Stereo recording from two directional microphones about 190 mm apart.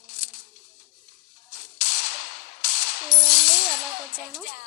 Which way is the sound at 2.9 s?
35° left (ahead or behind).